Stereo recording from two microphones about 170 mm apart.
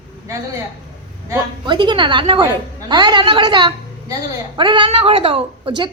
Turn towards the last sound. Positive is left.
turn(degrees=-35)  # may be behind; listen again after turning